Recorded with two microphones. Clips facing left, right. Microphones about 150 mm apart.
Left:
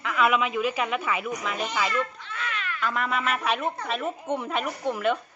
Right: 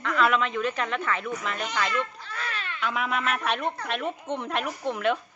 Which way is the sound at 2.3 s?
35° right (ahead or behind).